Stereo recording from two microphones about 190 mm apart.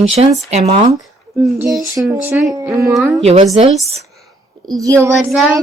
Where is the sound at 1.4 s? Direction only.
5° right (ahead or behind).